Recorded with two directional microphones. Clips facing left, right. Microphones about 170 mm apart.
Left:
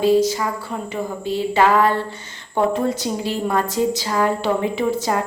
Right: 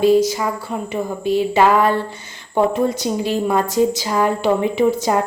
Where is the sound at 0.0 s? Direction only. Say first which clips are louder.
Right 2 dB; 15° right (ahead or behind).